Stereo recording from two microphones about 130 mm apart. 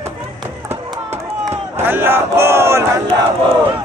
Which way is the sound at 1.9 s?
15° right (ahead or behind).